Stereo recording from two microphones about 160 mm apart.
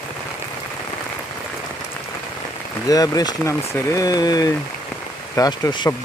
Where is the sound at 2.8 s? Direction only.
25° left (ahead or behind).